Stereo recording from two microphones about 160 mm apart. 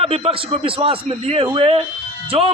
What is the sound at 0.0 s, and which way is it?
A man's voice, 35° right (ahead or behind).